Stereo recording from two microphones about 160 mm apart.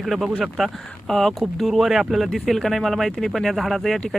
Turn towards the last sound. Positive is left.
turn(degrees=0)  # may be behind; listen again after turning